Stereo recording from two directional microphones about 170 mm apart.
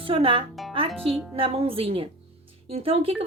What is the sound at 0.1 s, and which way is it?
Speech, 30° right (ahead or behind).